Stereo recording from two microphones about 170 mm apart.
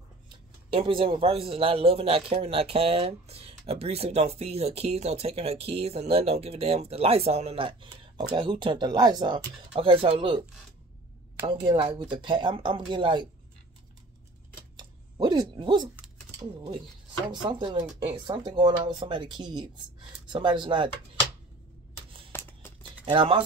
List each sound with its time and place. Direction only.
0.7 s a man's voice: 30° right (ahead or behind)
11.4 s speech: 30° right (ahead or behind)
14.8 s speech: 25° right (ahead or behind)
22.3 s a sound: 15° left (ahead or behind)
23.0 s speech: 30° right (ahead or behind)